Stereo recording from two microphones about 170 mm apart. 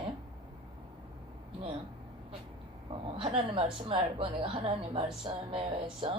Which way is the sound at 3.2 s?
35° right (ahead or behind).